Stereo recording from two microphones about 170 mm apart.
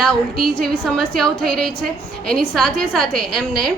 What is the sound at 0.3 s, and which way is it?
Speech, 60° right (ahead or behind).